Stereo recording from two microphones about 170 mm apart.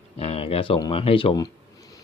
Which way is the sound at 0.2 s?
35° left (ahead or behind).